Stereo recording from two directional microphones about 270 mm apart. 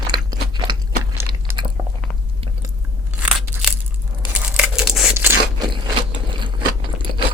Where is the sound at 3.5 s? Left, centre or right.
Centre.